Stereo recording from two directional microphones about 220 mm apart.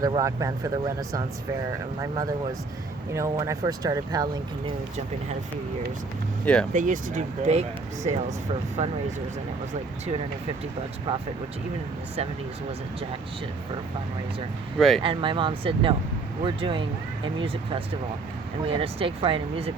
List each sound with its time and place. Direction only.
0.0 s speech: 15° right (ahead or behind)
6.4 s speech: 5° left (ahead or behind)
6.7 s speech: 35° right (ahead or behind)
14.8 s speech: centre (ahead or behind)
15.0 s speech: 25° right (ahead or behind)